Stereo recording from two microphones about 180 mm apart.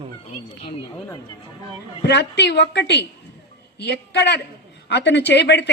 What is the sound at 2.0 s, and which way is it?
A woman's voice, 75° left (ahead or behind).